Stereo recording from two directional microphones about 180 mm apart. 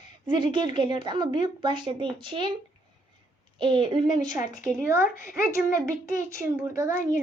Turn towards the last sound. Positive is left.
turn(degrees=-15)  # may be behind; listen again after turning